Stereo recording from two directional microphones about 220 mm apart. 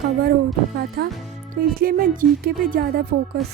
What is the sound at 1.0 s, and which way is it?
Speech, 45° right (ahead or behind).